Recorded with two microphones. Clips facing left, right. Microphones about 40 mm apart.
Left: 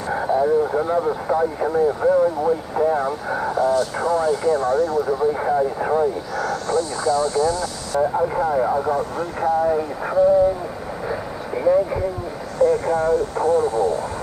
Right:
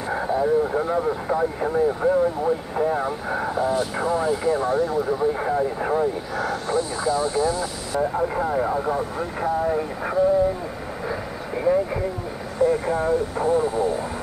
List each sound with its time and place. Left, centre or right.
0.1 s speech: centre
5.2 s speech: centre
6.3 s speech: centre
8.0 s speech: centre
11.1 s vehicle: centre
12.5 s speech: centre